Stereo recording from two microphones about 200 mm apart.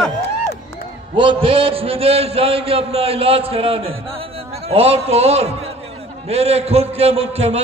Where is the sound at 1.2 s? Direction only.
25° right (ahead or behind).